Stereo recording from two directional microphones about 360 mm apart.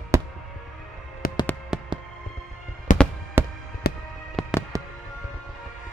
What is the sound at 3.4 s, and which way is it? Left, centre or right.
Music, centre.